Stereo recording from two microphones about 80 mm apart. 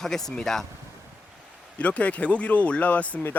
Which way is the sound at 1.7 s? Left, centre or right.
Centre.